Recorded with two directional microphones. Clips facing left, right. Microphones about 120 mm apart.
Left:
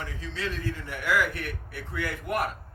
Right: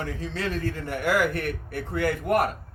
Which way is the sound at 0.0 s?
45° right (ahead or behind).